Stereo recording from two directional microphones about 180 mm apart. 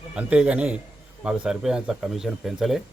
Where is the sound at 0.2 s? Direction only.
5° right (ahead or behind).